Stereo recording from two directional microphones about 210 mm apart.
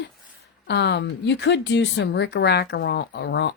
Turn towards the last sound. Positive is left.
turn(degrees=55)  # may be behind; listen again after turning